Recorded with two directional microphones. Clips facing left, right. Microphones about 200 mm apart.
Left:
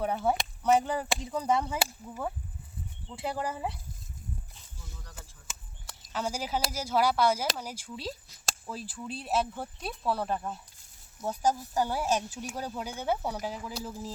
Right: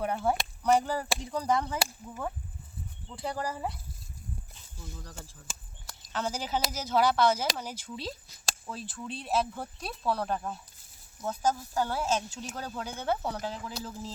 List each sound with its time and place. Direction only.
0.0 s speech: centre (ahead or behind)
5.0 s speech: 30° right (ahead or behind)
5.8 s speech: 5° left (ahead or behind)
11.2 s speech: 15° left (ahead or behind)